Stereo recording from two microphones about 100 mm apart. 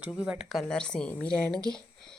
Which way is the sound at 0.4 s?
5° left (ahead or behind).